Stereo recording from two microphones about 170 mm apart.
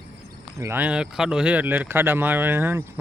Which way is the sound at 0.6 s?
15° right (ahead or behind).